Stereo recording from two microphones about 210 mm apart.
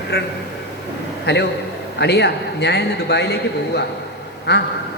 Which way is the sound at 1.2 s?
55° left (ahead or behind).